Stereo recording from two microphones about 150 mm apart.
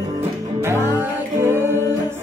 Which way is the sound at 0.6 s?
15° right (ahead or behind).